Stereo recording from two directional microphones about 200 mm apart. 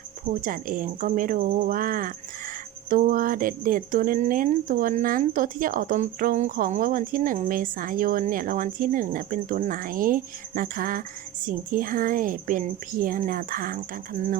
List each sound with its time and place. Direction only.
0.4 s a woman's voice: 40° right (ahead or behind)